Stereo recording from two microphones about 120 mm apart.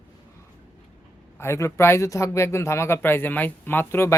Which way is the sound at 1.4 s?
20° left (ahead or behind).